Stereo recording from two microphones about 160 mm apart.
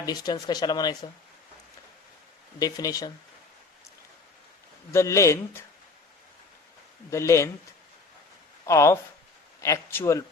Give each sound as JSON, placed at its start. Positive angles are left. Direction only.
{"t": 0.0, "sound": "speech", "side_deg": 25}
{"t": 2.6, "sound": "speech", "side_deg": 25}
{"t": 4.9, "sound": "speech", "side_deg": 20}
{"t": 7.1, "sound": "speech", "side_deg": 20}
{"t": 8.6, "sound": "speech", "side_deg": 20}